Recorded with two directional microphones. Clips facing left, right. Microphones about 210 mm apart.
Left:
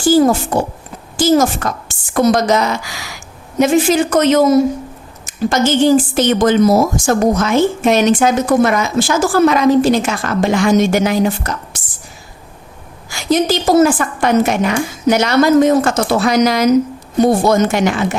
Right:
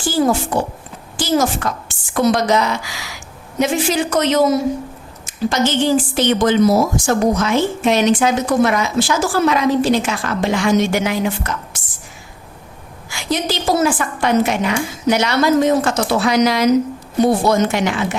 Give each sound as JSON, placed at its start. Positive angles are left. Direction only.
{"t": 0.1, "sound": "a woman's voice", "side_deg": 45}
{"t": 13.1, "sound": "a woman's voice", "side_deg": 45}